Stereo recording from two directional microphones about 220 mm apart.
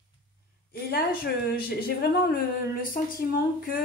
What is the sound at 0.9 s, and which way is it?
Speech, 45° left (ahead or behind).